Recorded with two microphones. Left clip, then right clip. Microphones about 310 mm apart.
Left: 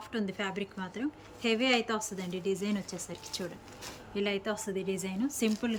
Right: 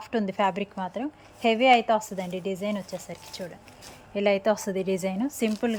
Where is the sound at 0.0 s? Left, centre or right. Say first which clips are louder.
Right 10 dB; centre.